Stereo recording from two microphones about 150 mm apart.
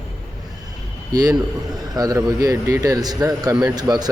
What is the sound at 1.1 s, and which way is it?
Speech, 25° right (ahead or behind).